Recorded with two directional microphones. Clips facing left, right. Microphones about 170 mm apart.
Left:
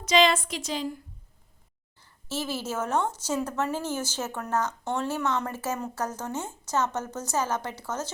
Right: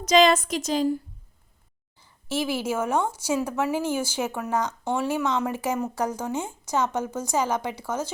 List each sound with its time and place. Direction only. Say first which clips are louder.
0.0 s a woman's voice: right 4 dB; 45° right (ahead or behind)
2.0 s a woman's voice: right 5 dB; 15° right (ahead or behind)